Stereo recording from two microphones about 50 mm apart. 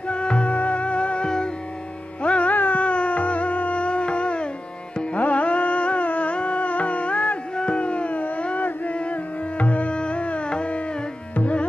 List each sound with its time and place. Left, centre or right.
0.1 s music: left
2.2 s music: left